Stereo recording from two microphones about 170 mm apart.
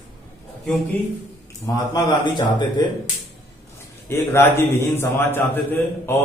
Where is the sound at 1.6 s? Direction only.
25° left (ahead or behind).